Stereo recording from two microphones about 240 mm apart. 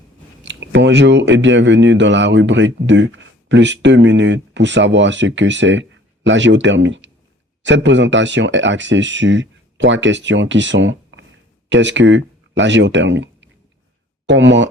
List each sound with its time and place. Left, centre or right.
0.4 s speech: right